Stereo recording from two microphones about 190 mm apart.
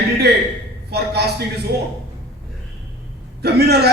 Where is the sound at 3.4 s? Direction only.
60° right (ahead or behind).